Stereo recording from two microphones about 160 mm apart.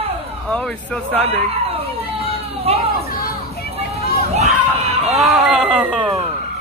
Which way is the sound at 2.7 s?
40° right (ahead or behind).